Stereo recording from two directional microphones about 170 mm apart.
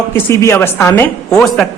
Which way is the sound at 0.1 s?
15° left (ahead or behind).